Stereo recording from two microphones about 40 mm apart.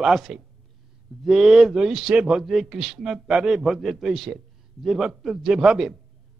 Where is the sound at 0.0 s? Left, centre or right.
Centre.